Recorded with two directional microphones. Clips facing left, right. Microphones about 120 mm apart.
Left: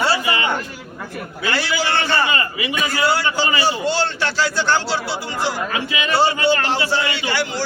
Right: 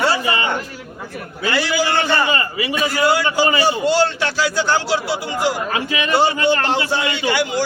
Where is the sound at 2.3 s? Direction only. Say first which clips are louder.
Right 2 dB; 35° right (ahead or behind).